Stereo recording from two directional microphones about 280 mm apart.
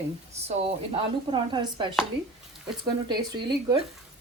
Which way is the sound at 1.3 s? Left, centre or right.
Centre.